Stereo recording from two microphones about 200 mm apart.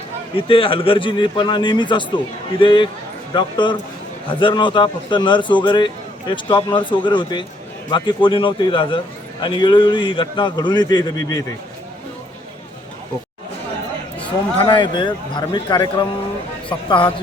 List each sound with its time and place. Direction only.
0.3 s a man's voice: 25° left (ahead or behind)
14.2 s a man's voice: 25° left (ahead or behind)